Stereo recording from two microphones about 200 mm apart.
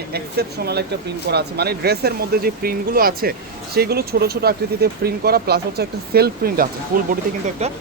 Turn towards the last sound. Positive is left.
turn(degrees=-30)  # may be behind; listen again after turning